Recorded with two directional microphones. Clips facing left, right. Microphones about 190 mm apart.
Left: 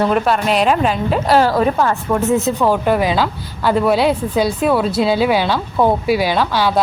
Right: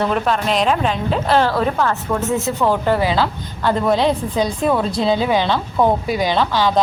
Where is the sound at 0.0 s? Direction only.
5° left (ahead or behind).